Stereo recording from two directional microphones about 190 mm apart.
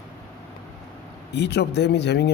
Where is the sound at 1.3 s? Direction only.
60° left (ahead or behind).